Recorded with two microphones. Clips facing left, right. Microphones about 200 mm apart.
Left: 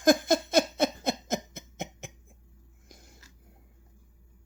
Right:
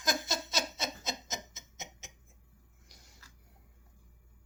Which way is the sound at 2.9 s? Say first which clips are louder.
Left 9 dB; 50° left (ahead or behind).